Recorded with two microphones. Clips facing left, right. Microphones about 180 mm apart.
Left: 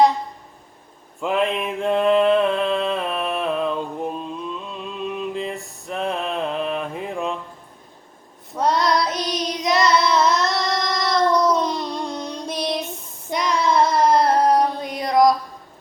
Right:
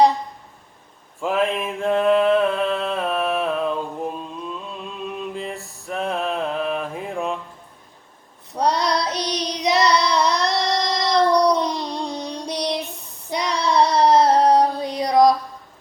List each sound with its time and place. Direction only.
1.2 s mantra: centre (ahead or behind)
8.5 s child singing: 20° right (ahead or behind)
13.7 s a sound: 20° right (ahead or behind)